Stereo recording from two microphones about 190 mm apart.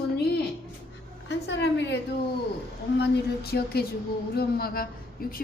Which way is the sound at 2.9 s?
60° left (ahead or behind).